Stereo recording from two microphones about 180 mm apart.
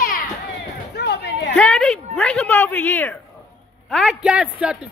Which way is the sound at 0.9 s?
65° left (ahead or behind).